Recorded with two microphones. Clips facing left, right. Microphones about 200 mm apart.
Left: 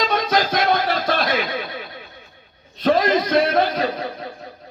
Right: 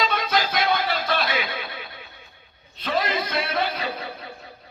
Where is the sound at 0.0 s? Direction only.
40° left (ahead or behind).